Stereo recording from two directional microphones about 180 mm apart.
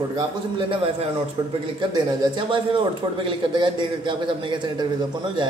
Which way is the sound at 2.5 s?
30° right (ahead or behind).